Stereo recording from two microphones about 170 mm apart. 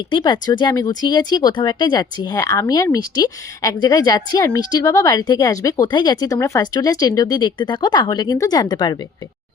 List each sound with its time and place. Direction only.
0.1 s speech: 25° left (ahead or behind)